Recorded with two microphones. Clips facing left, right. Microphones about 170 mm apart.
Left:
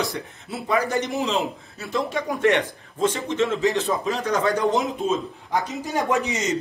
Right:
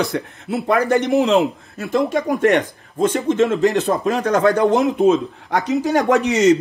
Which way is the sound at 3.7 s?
65° right (ahead or behind).